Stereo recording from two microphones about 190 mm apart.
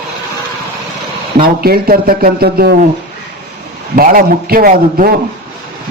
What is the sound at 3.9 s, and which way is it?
A man's voice, 50° right (ahead or behind).